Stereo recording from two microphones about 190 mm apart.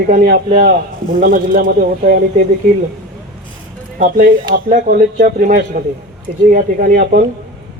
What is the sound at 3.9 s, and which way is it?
Speech, 50° right (ahead or behind).